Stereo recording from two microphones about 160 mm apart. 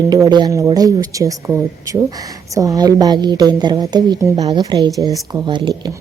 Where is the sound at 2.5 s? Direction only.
20° right (ahead or behind).